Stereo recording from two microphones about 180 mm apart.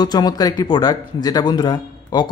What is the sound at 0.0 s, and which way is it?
Speech, 20° left (ahead or behind).